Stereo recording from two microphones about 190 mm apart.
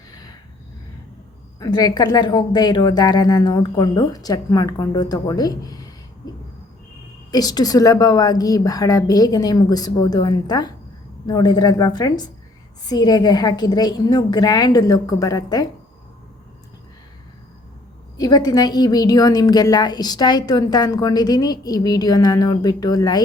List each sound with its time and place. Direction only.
1.5 s a woman's voice: 20° left (ahead or behind)
7.3 s a woman's voice: 20° left (ahead or behind)
18.2 s a woman's voice: 20° left (ahead or behind)